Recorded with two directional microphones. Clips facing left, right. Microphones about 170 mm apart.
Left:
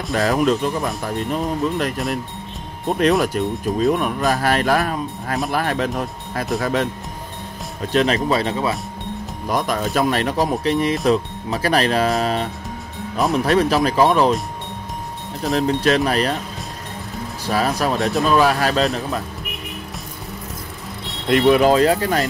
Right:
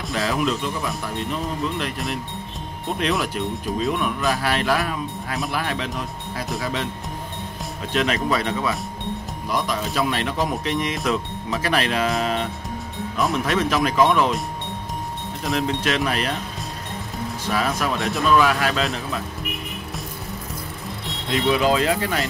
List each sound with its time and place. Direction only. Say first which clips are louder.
0.1 s speech: left 5 dB; 40° left (ahead or behind)
3.0 s speech: left 7 dB; 45° left (ahead or behind)
7.8 s speech: left 5 dB; 40° left (ahead or behind)
9.5 s speech: left 4 dB; 50° left (ahead or behind)
15.4 s speech: left 5 dB; 35° left (ahead or behind)
17.5 s speech: left 4 dB; 35° left (ahead or behind)
21.3 s speech: left 6 dB; 55° left (ahead or behind)